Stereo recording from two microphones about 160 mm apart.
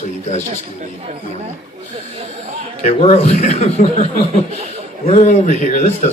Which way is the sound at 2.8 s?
40° left (ahead or behind).